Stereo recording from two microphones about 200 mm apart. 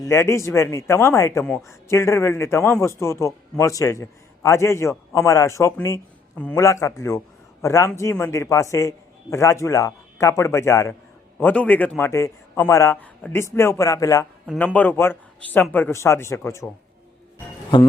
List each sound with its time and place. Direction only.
0.0 s a man's voice: 15° left (ahead or behind)